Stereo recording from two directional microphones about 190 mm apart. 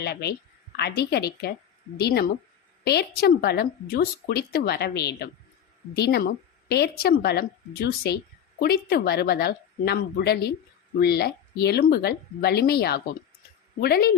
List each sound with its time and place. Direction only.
0.0 s a woman's voice: 60° left (ahead or behind)